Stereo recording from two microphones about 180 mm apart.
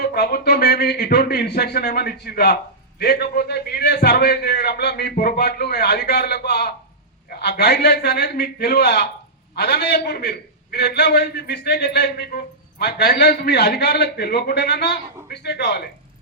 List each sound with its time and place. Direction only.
0.0 s a man's voice: 60° left (ahead or behind)